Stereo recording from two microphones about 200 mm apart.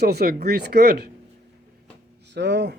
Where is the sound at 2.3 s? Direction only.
60° right (ahead or behind).